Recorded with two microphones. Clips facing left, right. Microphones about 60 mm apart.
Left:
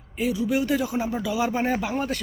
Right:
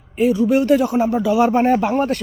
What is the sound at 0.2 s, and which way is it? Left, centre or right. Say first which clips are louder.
Speech: right 8 dB; right.